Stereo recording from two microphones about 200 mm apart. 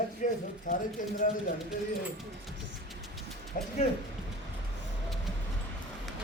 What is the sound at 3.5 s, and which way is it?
Speech, 40° left (ahead or behind).